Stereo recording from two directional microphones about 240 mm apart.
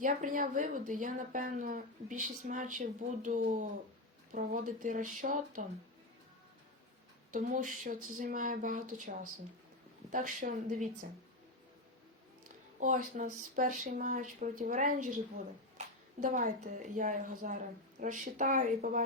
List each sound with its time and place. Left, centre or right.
0.0 s speech: right
7.3 s speech: right
12.8 s speech: right